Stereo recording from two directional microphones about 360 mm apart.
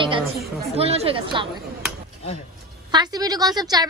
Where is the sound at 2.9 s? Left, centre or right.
Centre.